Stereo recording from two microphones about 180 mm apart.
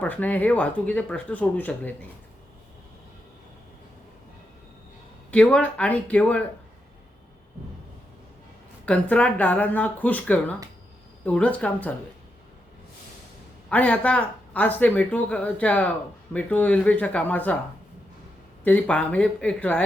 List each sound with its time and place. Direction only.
0.0 s speech: 10° left (ahead or behind)
5.3 s speech: 5° left (ahead or behind)
8.9 s speech: 5° left (ahead or behind)
13.7 s speech: 10° left (ahead or behind)
18.6 s speech: 10° left (ahead or behind)